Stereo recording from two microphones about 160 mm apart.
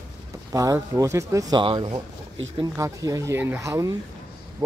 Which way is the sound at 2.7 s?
20° right (ahead or behind).